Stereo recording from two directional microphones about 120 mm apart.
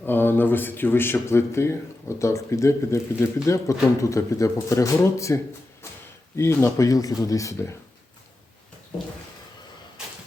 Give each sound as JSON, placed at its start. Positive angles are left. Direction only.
{"t": 0.0, "sound": "speech", "side_deg": 15}